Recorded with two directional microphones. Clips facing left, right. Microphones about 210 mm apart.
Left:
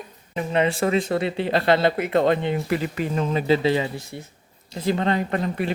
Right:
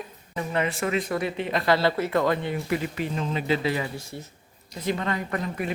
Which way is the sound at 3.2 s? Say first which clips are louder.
Left 6 dB; 40° left (ahead or behind).